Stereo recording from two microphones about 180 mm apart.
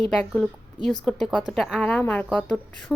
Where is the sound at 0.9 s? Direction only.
Centre (ahead or behind).